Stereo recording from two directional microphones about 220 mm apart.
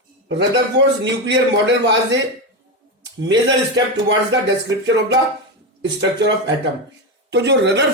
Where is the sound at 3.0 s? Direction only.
55° right (ahead or behind).